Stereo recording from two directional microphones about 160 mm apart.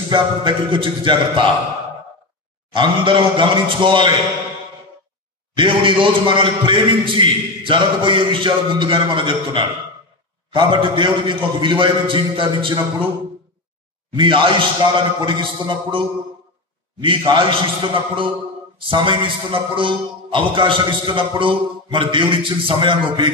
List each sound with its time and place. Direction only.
0.1 s a man's voice: 30° right (ahead or behind)
2.7 s a man's voice: 30° right (ahead or behind)
5.6 s a man's voice: 30° right (ahead or behind)
14.1 s a man's voice: 30° right (ahead or behind)
17.0 s a man's voice: 35° right (ahead or behind)